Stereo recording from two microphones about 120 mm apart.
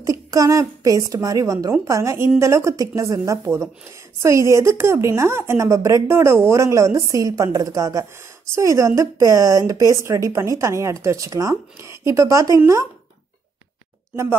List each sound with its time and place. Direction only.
0.0 s a woman's voice: 30° right (ahead or behind)